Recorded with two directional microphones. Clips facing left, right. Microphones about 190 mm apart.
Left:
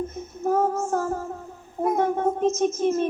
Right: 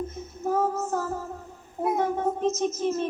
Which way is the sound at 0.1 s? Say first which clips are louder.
Left 3 dB; 50° left (ahead or behind).